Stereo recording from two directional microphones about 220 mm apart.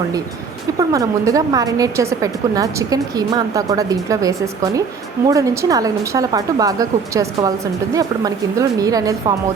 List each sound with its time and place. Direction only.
0.8 s a woman's voice: 15° right (ahead or behind)